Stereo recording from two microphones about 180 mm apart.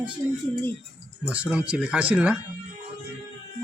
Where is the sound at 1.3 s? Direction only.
5° right (ahead or behind).